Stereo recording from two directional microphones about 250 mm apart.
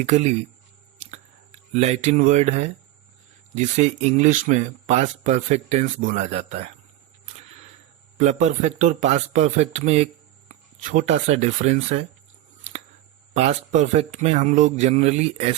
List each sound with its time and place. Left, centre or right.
0.0 s speech: right
1.7 s speech: right
8.2 s speech: right
13.3 s speech: right